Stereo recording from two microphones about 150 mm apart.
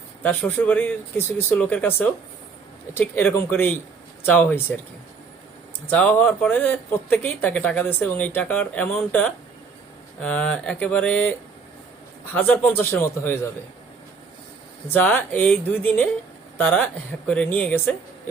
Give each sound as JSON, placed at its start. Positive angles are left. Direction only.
{"t": 0.2, "sound": "speech", "side_deg": 10}
{"t": 5.9, "sound": "speech", "side_deg": 10}
{"t": 14.8, "sound": "speech", "side_deg": 10}